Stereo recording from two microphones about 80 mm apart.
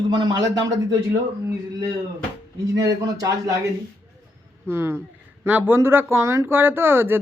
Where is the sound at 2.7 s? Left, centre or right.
Right.